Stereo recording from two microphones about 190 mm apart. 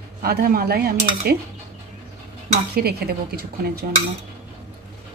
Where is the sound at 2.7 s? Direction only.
55° right (ahead or behind).